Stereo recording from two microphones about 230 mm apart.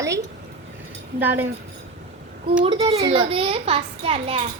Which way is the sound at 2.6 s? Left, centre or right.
Right.